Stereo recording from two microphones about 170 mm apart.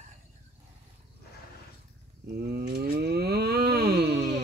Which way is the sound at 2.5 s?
65° right (ahead or behind).